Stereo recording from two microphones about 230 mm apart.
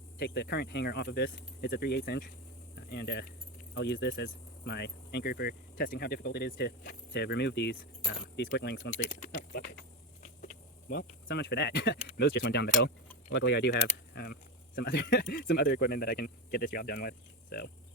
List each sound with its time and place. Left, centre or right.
0.2 s speech: left
10.2 s a sound: left
11.3 s speech: left